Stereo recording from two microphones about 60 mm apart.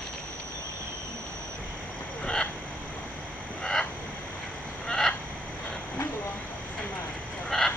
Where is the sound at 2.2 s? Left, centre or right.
Centre.